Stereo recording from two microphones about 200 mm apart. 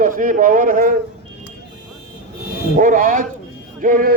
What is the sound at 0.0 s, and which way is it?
Speech, 40° right (ahead or behind).